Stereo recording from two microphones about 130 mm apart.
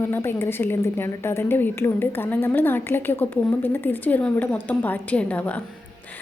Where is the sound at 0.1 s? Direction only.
20° left (ahead or behind).